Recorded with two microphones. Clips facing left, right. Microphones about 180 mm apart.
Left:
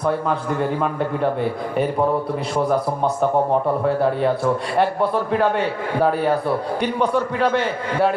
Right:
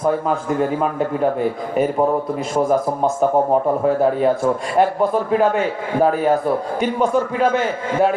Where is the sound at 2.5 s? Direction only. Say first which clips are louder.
Right 3 dB; 45° right (ahead or behind).